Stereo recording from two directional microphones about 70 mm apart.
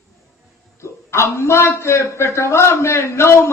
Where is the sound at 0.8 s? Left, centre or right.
Left.